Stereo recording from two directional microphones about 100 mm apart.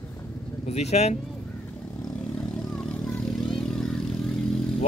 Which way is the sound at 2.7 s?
5° left (ahead or behind).